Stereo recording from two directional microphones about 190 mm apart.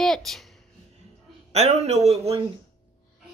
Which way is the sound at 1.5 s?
35° right (ahead or behind).